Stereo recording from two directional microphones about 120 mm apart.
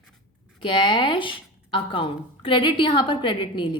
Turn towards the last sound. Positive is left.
turn(degrees=45)  # may be behind; listen again after turning